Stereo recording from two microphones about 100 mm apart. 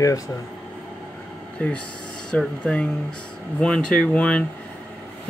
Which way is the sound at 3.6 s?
10° left (ahead or behind).